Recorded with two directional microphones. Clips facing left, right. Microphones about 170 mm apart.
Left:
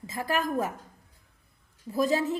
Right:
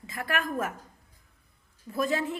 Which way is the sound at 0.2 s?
35° left (ahead or behind).